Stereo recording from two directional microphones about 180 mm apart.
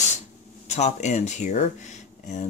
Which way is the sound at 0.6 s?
40° left (ahead or behind).